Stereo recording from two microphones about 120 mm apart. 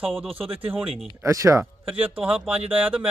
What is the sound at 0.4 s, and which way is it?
Speech, 50° right (ahead or behind).